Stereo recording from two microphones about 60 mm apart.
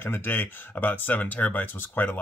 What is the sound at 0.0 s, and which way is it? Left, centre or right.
A man's voice, left.